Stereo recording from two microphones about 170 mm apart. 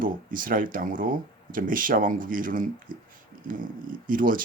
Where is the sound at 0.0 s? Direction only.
55° right (ahead or behind).